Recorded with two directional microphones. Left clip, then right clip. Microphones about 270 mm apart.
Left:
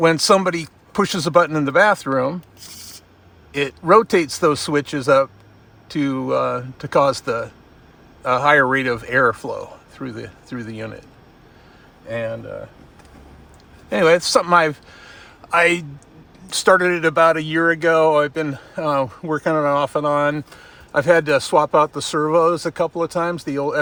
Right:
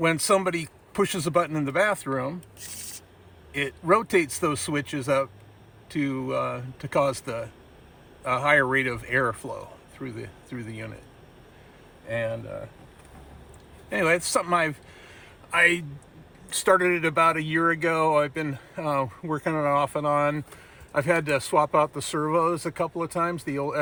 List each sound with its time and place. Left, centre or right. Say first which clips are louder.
0.0 s speech: left 8 dB; centre
3.5 s speech: left 9 dB; centre
12.0 s speech: left 4 dB; centre
13.9 s a man's voice: left 9 dB; centre